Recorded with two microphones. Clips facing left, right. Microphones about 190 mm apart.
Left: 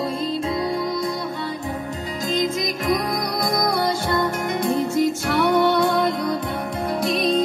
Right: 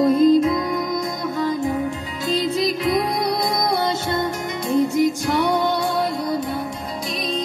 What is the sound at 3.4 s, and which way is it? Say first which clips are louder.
Music: even; 50° left (ahead or behind).